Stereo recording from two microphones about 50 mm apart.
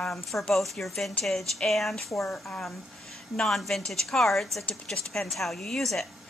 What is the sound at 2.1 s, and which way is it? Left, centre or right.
Speech, left.